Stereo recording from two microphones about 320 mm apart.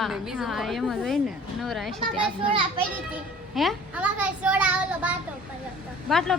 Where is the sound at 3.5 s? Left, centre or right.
Centre.